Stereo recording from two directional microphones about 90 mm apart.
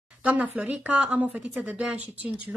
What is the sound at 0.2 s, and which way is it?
Speech, 15° right (ahead or behind).